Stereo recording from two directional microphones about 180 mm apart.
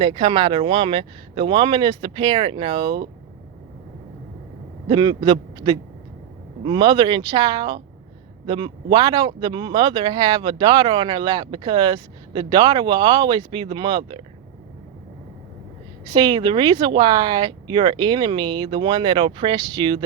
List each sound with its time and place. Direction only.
0.0 s speech: 25° right (ahead or behind)
4.9 s speech: 25° right (ahead or behind)
16.1 s speech: 25° right (ahead or behind)